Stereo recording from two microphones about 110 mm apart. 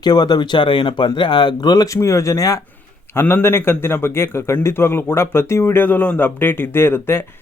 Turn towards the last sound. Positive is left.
turn(degrees=20)  # may be behind; listen again after turning